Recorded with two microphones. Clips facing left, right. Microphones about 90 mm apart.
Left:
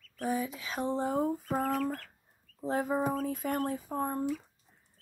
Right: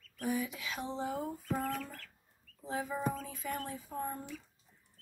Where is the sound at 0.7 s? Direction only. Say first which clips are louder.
Left 8 dB; 50° left (ahead or behind).